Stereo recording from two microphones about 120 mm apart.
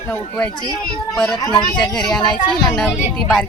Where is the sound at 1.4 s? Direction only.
35° left (ahead or behind).